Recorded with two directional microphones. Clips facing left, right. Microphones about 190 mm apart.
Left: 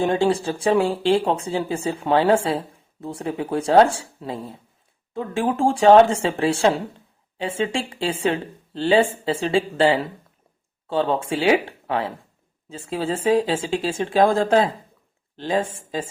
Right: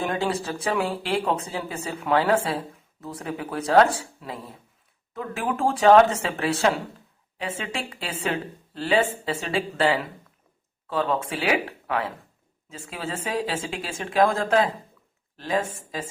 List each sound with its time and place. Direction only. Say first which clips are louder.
0.0 s speech: left 6 dB; 30° left (ahead or behind)